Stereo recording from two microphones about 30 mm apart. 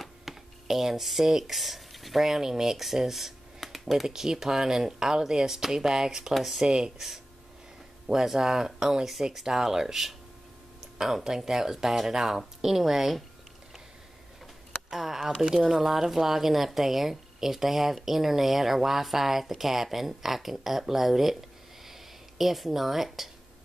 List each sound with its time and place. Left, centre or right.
0.0 s a sound: centre
2.2 s a woman's voice: centre
6.3 s a woman's voice: centre
6.6 s speech: right
8.1 s speech: centre
9.3 s a woman's voice: centre
14.9 s a sound: centre
15.7 s a woman's voice: centre
22.4 s a woman's voice: centre